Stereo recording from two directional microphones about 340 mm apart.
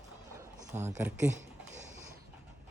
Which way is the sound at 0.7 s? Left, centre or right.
Right.